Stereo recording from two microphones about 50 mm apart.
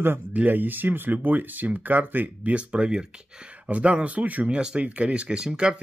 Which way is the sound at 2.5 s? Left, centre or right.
Right.